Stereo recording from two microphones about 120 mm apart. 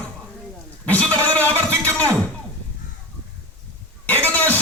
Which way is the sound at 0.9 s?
10° left (ahead or behind).